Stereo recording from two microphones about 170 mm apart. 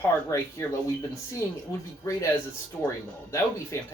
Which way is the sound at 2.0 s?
20° left (ahead or behind).